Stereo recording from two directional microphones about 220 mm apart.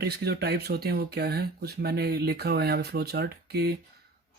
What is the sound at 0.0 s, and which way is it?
Speech, 45° right (ahead or behind).